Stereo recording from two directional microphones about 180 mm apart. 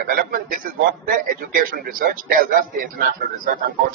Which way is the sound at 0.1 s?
50° right (ahead or behind).